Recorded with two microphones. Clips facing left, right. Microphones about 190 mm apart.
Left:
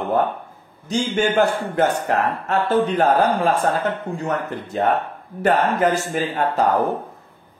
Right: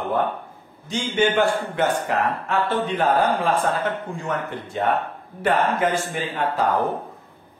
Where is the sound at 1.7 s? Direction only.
45° left (ahead or behind).